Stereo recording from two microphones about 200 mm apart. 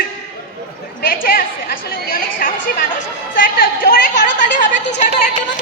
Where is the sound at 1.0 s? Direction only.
45° left (ahead or behind).